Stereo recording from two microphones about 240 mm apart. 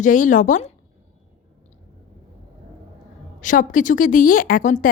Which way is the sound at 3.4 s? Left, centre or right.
Left.